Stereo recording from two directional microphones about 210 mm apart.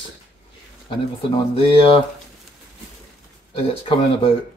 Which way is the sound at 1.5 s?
25° left (ahead or behind).